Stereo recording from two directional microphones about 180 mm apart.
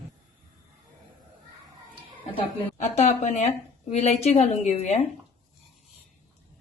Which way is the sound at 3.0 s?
40° left (ahead or behind).